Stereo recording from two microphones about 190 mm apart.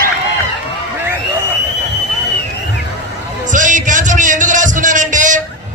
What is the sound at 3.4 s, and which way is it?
Music, 40° right (ahead or behind).